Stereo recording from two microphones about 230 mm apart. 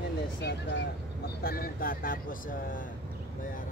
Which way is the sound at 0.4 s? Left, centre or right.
Left.